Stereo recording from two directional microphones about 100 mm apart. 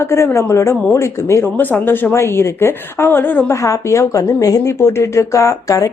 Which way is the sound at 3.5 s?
30° left (ahead or behind).